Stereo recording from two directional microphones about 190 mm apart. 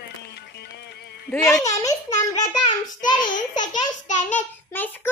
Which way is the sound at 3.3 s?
40° left (ahead or behind).